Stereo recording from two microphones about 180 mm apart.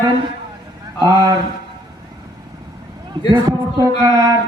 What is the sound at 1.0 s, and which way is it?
Mantra, 20° right (ahead or behind).